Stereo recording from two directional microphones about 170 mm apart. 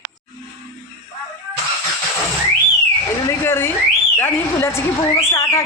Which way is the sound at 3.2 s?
15° left (ahead or behind).